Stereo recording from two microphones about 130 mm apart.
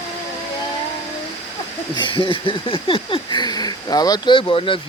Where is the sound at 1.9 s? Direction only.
40° left (ahead or behind).